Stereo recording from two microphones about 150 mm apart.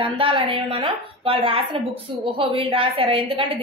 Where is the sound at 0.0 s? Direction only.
35° right (ahead or behind).